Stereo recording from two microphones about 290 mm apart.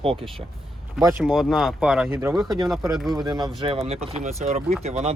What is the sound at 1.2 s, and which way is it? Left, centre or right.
Speech, centre.